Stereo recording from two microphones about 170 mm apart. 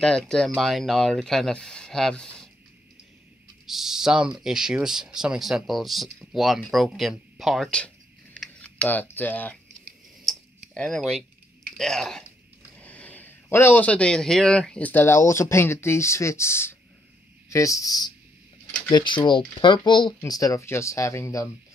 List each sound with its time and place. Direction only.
0.0 s speech: 5° left (ahead or behind)
3.6 s speech: centre (ahead or behind)
8.4 s a sound: 5° left (ahead or behind)
11.7 s a man's voice: 5° left (ahead or behind)